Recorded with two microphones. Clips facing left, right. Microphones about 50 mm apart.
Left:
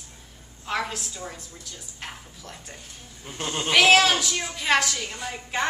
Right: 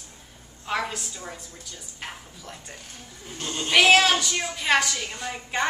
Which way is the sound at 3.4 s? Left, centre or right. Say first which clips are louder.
Left 2 dB; left.